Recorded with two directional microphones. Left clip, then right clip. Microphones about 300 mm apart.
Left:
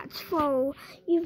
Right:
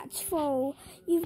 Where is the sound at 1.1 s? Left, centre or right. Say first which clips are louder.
Left 2 dB; centre.